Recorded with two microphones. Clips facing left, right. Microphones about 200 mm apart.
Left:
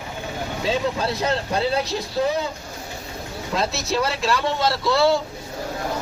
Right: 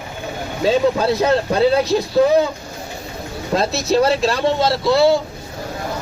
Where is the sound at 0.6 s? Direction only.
50° right (ahead or behind).